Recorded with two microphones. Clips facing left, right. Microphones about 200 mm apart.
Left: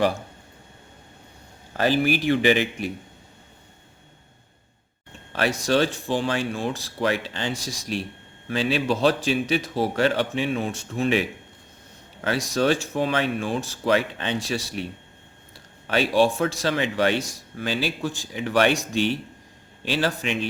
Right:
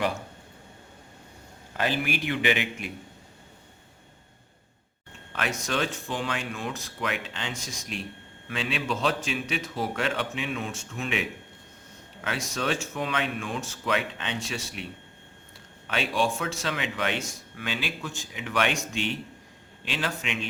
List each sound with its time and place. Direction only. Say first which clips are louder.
1.7 s speech: left 7 dB; 35° left (ahead or behind)
5.3 s speech: left 8 dB; 35° left (ahead or behind)
12.2 s speech: left 8 dB; 35° left (ahead or behind)
15.9 s speech: left 7 dB; 35° left (ahead or behind)